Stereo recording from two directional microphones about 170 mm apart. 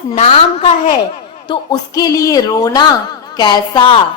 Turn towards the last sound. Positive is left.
turn(degrees=30)  # may be behind; listen again after turning